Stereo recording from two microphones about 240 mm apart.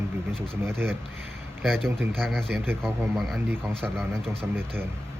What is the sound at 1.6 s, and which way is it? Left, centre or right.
Speech, centre.